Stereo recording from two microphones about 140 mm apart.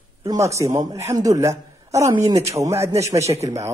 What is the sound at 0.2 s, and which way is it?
A man's voice, 20° right (ahead or behind).